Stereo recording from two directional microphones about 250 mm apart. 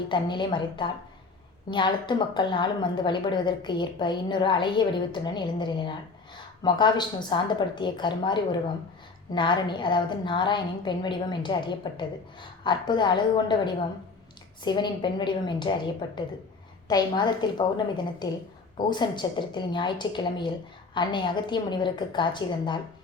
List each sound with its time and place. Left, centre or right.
0.1 s a woman's voice: centre